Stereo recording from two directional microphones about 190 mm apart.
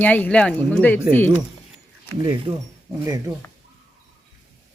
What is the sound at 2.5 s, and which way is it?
Speech, 25° right (ahead or behind).